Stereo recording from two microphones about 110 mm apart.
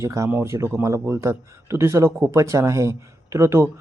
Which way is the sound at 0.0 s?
25° right (ahead or behind).